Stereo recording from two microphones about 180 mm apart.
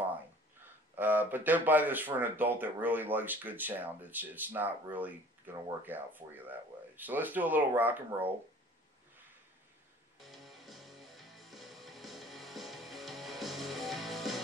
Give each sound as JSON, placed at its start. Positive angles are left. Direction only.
{"t": 0.9, "sound": "speech", "side_deg": -10}
{"t": 10.1, "sound": "music", "side_deg": 0}